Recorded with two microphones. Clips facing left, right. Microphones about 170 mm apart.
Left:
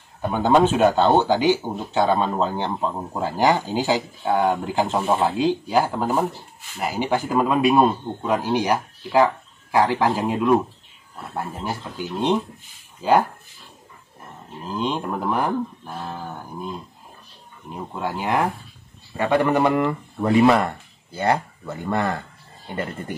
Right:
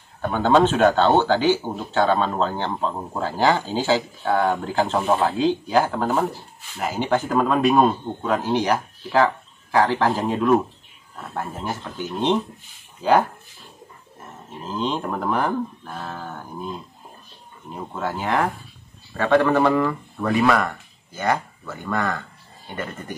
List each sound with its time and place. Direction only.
0.2 s speech: 10° left (ahead or behind)
3.2 s speech: 15° left (ahead or behind)
4.8 s speech: centre (ahead or behind)
11.5 s speech: 5° left (ahead or behind)
14.7 s speech: 10° left (ahead or behind)
17.6 s speech: 10° left (ahead or behind); by 22.2 s 25° left (ahead or behind)